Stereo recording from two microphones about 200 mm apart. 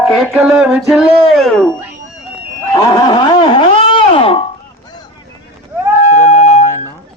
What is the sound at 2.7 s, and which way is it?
Music, 20° left (ahead or behind).